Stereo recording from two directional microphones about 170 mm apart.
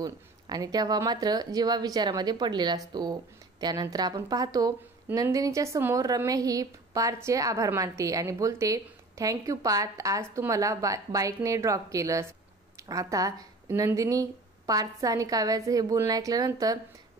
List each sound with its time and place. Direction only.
0.0 s speech: 25° right (ahead or behind)